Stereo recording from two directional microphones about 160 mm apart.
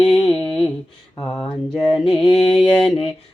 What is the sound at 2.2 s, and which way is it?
Mantra, 35° left (ahead or behind).